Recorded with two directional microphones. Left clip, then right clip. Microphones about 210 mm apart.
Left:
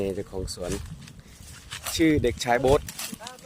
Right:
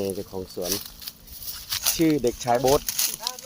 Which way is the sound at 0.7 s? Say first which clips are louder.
Right 4 dB; 50° right (ahead or behind).